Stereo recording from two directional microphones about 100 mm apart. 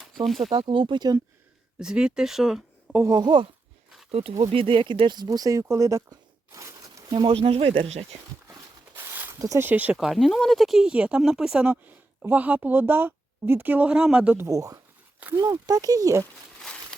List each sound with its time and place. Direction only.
0.0 s speech: centre (ahead or behind)
0.5 s speech: 65° right (ahead or behind); by 1.2 s 45° right (ahead or behind)
1.8 s speech: 10° right (ahead or behind)
3.0 s speech: 35° right (ahead or behind)
4.1 s speech: 85° right
4.5 s speech: 65° right (ahead or behind); by 7.0 s 35° right (ahead or behind)
7.1 s speech: 60° right (ahead or behind); by 8.0 s 80° right
9.0 s a sound: 25° right (ahead or behind)
9.6 s speech: 20° right (ahead or behind)
10.0 s speech: centre (ahead or behind)
14.3 s speech: 30° right (ahead or behind)